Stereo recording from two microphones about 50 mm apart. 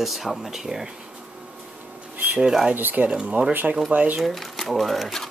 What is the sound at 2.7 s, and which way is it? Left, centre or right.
Speech, right.